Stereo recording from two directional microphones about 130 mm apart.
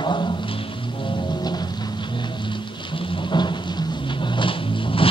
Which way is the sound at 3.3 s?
35° left (ahead or behind).